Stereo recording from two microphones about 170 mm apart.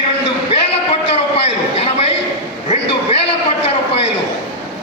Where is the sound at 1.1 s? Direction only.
35° left (ahead or behind).